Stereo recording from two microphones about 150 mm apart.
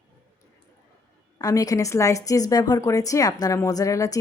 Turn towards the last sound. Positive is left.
turn(degrees=20)  # may be behind; listen again after turning